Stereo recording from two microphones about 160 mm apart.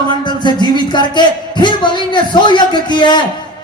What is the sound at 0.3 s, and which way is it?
Music, 30° left (ahead or behind).